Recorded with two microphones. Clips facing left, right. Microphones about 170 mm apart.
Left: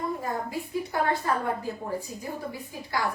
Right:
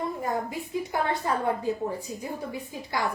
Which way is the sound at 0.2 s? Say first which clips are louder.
Right 2 dB; 20° right (ahead or behind).